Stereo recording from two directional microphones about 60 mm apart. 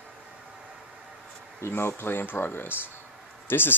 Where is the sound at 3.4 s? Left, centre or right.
Left.